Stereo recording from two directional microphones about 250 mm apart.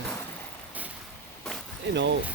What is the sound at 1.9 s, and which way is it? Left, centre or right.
Speech, right.